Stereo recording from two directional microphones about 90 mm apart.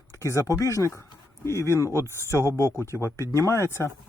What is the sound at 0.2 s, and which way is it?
Speech, 35° left (ahead or behind).